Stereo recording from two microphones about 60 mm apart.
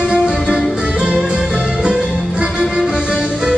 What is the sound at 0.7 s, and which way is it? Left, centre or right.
Music, centre.